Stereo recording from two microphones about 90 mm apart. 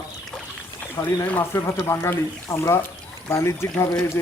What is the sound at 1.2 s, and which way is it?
Speech, 25° left (ahead or behind).